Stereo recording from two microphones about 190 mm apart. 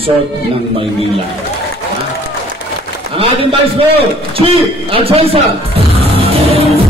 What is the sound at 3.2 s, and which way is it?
A man's voice, 30° right (ahead or behind).